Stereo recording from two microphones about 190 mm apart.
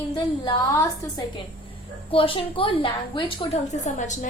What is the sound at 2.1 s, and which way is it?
A woman's voice, 30° left (ahead or behind).